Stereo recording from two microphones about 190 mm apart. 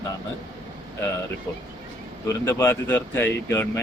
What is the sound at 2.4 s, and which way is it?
Speech, 15° left (ahead or behind).